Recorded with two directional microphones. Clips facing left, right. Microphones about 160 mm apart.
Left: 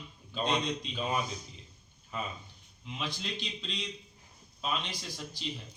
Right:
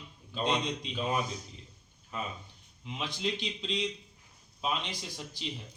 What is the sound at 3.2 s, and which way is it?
A man's voice, 20° right (ahead or behind).